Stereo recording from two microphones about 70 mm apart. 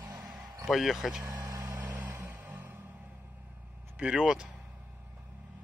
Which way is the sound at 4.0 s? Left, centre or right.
Centre.